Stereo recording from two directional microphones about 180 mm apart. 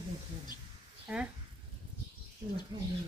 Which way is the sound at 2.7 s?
25° right (ahead or behind).